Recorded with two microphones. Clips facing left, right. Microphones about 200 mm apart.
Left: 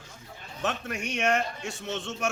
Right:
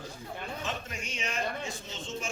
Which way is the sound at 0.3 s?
65° right (ahead or behind).